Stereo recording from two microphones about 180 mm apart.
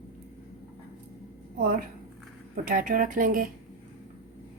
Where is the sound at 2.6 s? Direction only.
50° right (ahead or behind).